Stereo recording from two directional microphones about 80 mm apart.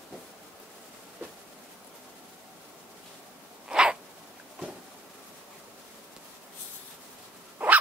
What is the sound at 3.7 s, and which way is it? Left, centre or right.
Sneeze, centre.